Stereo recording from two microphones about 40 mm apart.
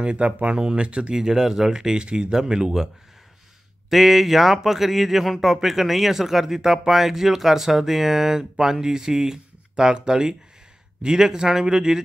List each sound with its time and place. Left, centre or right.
0.0 s speech: right
0.6 s speech: centre
1.1 s speech: centre
3.9 s speech: centre